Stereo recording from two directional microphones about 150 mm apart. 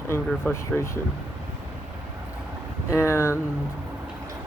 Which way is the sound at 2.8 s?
20° left (ahead or behind).